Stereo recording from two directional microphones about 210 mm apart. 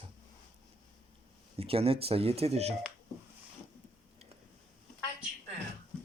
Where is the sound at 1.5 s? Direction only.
25° right (ahead or behind).